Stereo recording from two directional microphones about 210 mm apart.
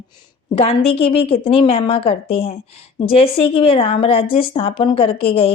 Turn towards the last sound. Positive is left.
turn(degrees=25)  # may be behind; listen again after turning